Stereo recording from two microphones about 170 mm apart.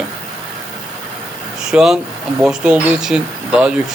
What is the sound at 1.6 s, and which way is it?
Speech, 5° right (ahead or behind).